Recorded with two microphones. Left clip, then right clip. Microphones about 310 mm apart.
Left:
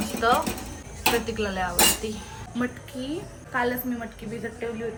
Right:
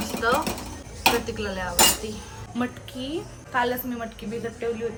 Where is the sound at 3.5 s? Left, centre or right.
Centre.